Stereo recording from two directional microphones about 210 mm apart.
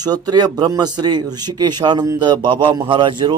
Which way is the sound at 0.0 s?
20° right (ahead or behind).